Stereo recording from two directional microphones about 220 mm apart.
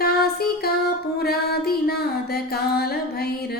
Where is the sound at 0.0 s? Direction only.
45° left (ahead or behind).